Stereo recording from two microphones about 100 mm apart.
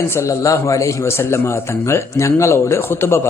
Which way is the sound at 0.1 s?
30° left (ahead or behind).